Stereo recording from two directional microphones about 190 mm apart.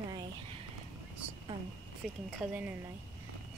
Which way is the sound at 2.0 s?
Centre (ahead or behind).